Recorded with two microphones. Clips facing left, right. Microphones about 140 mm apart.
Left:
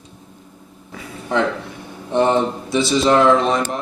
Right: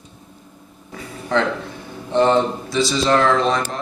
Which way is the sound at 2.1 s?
15° left (ahead or behind).